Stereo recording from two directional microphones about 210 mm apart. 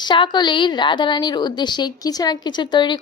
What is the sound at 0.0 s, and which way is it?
A woman's voice, 20° left (ahead or behind).